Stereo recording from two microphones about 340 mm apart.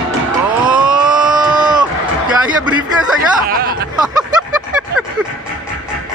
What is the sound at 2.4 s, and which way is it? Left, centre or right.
Speech, centre.